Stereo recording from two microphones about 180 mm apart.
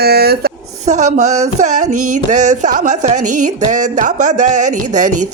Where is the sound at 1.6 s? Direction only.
40° right (ahead or behind).